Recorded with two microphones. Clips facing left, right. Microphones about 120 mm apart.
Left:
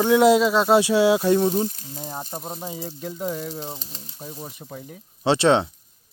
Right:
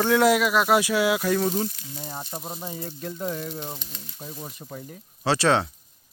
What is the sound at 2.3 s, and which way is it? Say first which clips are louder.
Speech: left 2 dB; 15° left (ahead or behind).